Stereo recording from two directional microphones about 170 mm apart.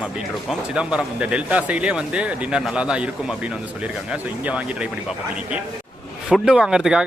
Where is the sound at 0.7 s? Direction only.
5° right (ahead or behind).